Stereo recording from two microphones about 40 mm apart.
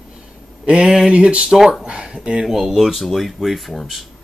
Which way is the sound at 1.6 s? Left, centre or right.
Centre.